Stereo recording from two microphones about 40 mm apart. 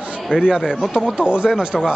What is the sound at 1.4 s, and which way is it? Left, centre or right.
Speech, centre.